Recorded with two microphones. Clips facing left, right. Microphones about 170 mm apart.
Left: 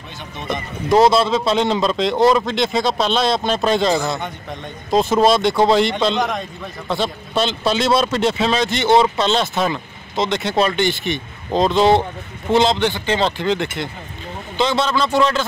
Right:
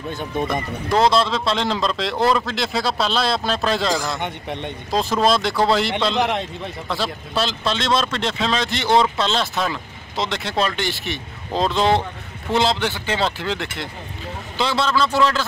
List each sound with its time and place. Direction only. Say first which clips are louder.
0.9 s a man's voice: left 4 dB; 5° left (ahead or behind)
4.2 s a man's voice: right 2 dB; 25° right (ahead or behind)
4.9 s a man's voice: left 4 dB; centre (ahead or behind)